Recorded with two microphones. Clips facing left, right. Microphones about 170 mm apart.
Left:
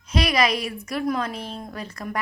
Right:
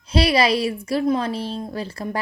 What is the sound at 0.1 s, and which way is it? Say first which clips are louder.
A woman's voice: right 4 dB; 30° right (ahead or behind).